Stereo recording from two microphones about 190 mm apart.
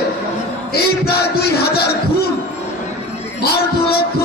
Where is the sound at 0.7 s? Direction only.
55° left (ahead or behind).